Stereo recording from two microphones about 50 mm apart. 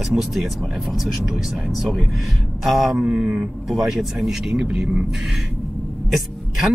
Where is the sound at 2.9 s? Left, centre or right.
Centre.